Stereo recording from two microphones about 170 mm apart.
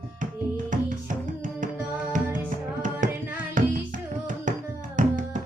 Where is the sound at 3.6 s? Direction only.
50° right (ahead or behind).